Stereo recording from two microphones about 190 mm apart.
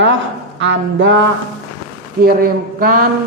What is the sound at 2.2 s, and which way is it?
Speech, 50° right (ahead or behind).